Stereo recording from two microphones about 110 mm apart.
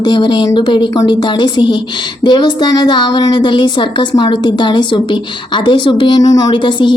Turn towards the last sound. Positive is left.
turn(degrees=45)  # may be behind; listen again after turning